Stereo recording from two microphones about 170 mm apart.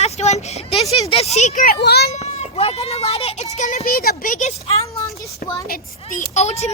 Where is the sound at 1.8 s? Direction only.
70° left (ahead or behind).